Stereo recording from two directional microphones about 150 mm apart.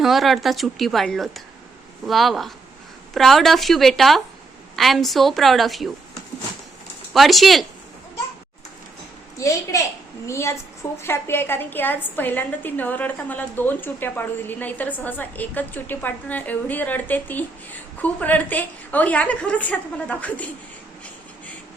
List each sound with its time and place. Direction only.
0.0 s speech: centre (ahead or behind)
7.1 s speech: centre (ahead or behind)
9.4 s a woman's voice: 20° left (ahead or behind)